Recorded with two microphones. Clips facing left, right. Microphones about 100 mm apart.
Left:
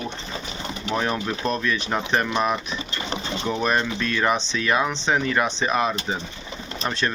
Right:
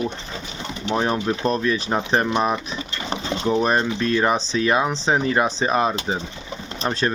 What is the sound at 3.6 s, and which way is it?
Speech, 30° right (ahead or behind).